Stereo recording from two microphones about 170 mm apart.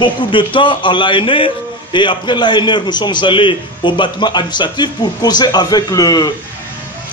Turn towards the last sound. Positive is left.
turn(degrees=20)  # may be behind; listen again after turning